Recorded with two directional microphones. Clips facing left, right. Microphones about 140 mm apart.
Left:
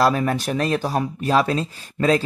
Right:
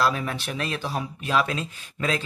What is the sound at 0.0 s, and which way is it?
Speech, 40° left (ahead or behind).